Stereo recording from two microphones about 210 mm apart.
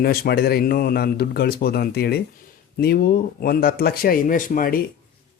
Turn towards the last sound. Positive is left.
turn(degrees=40)  # may be behind; listen again after turning